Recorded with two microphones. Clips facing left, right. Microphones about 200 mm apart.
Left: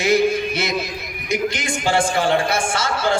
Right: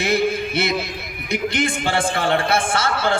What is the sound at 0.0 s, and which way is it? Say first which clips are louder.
Music: left 3 dB; 55° right (ahead or behind).